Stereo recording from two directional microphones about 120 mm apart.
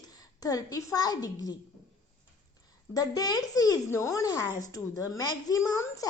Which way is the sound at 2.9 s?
30° left (ahead or behind).